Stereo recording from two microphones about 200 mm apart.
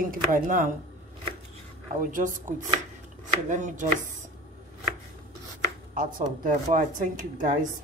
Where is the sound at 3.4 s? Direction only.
40° right (ahead or behind).